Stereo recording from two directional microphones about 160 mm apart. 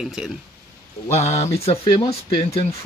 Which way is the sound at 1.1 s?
45° left (ahead or behind).